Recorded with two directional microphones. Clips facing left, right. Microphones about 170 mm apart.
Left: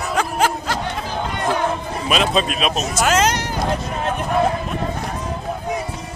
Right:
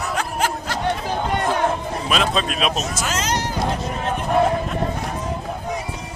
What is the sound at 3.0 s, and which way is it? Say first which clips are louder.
Speech: left 10 dB; 65° left (ahead or behind).